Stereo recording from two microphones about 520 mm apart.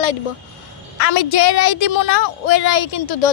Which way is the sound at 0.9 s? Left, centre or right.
Left.